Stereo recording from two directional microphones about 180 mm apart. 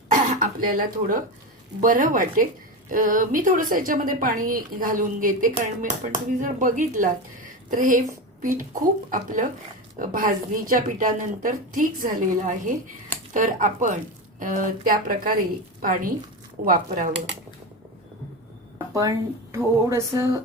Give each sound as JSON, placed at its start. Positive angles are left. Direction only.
{"t": 0.1, "sound": "a woman's voice", "side_deg": -50}
{"t": 18.9, "sound": "speech", "side_deg": -20}